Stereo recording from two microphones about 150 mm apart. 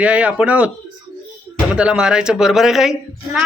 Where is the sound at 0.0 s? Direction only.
10° right (ahead or behind).